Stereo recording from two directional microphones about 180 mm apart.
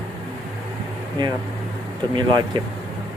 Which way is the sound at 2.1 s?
25° right (ahead or behind).